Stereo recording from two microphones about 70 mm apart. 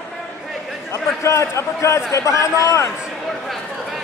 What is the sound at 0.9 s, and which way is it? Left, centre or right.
A man's voice, left.